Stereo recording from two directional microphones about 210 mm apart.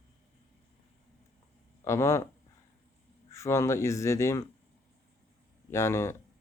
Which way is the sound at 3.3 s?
15° left (ahead or behind).